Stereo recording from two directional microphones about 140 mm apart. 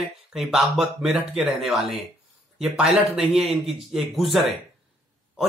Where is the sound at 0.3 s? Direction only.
Centre (ahead or behind).